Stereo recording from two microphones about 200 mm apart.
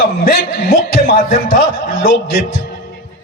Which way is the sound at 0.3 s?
50° left (ahead or behind).